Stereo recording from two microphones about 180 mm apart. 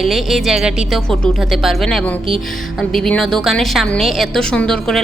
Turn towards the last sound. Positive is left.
turn(degrees=5)  # may be behind; listen again after turning